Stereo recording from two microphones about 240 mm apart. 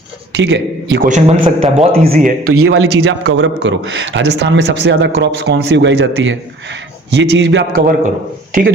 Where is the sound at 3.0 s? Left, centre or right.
Right.